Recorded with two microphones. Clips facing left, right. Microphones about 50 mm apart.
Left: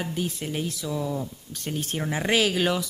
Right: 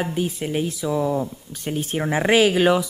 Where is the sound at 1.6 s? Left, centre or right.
Centre.